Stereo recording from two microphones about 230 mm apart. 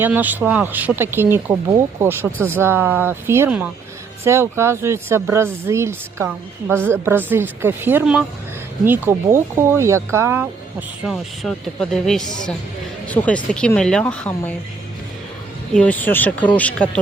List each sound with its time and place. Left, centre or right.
0.0 s speech: centre
15.7 s speech: centre